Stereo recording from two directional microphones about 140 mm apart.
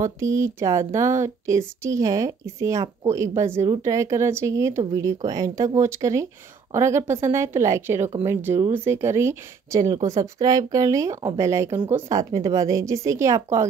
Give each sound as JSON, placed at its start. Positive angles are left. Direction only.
{"t": 0.0, "sound": "speech", "side_deg": -20}